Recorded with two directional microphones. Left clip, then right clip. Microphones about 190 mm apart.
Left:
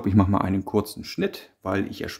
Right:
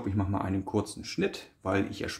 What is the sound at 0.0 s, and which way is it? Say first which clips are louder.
Speech: left 11 dB; 50° left (ahead or behind).